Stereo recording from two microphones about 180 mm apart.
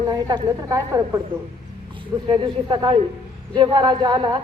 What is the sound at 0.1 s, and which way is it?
Speech, 25° right (ahead or behind).